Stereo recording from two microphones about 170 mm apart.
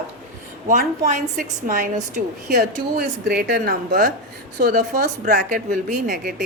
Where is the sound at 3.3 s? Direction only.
65° right (ahead or behind).